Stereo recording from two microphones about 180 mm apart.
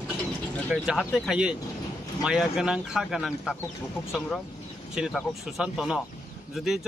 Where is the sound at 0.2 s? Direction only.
5° right (ahead or behind).